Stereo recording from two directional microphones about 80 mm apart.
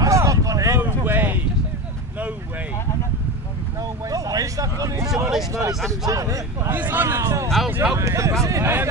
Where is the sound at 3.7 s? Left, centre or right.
Right.